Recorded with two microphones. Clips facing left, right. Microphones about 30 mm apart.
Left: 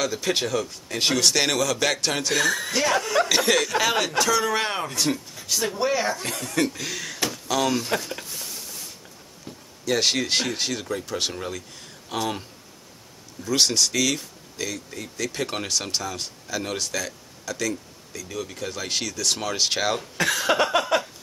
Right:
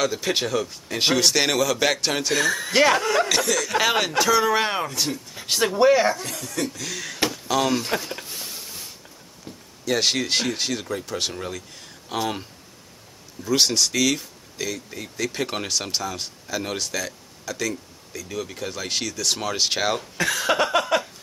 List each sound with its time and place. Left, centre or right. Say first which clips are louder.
0.0 s a man's voice: right 1 dB; centre
2.7 s speech: right 8 dB; right
3.2 s speech: even; centre
3.6 s a man's voice: right 1 dB; centre
5.1 s speech: left 4 dB; left
5.5 s speech: right 4 dB; right
5.9 s speech: right 7 dB; right
6.4 s speech: left 5 dB; left
6.8 s speech: even; centre
7.2 s a sound: right 2 dB; centre
9.8 s a man's voice: even; centre